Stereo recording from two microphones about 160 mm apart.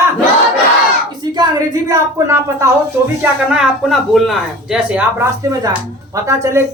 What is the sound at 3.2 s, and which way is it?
Speech, 5° right (ahead or behind).